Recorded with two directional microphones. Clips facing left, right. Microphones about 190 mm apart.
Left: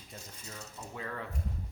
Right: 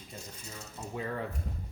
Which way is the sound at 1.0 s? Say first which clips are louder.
Right 5 dB; 20° right (ahead or behind).